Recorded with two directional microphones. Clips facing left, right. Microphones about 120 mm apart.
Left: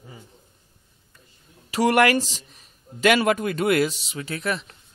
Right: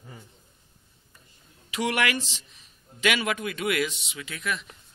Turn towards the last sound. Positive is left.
turn(degrees=35)  # may be behind; listen again after turning